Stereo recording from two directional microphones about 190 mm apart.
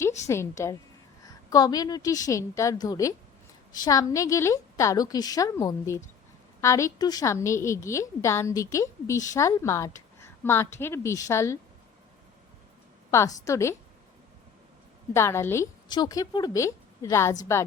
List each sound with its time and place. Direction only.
0.3 s a woman's voice: 15° left (ahead or behind)
13.1 s a woman's voice: 15° left (ahead or behind)
15.1 s a woman's voice: 15° left (ahead or behind)